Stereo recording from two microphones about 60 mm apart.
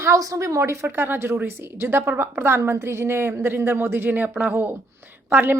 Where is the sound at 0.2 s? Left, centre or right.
Right.